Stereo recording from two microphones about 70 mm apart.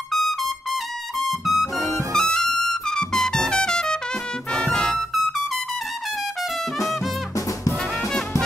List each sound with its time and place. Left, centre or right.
0.1 s trumpet: centre
1.2 s music: centre
4.5 s trumpet: centre
7.3 s music: left